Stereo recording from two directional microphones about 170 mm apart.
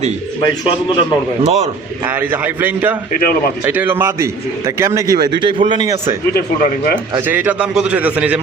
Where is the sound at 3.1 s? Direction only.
60° left (ahead or behind).